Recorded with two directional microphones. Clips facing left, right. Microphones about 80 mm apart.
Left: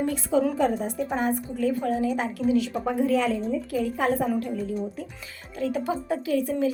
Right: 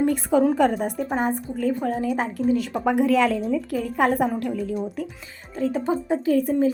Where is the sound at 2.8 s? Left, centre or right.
Right.